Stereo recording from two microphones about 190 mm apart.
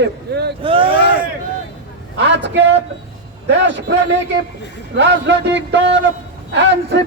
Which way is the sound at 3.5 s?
75° right (ahead or behind).